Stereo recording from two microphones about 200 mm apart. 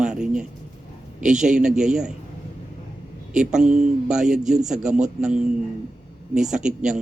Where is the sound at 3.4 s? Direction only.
5° right (ahead or behind).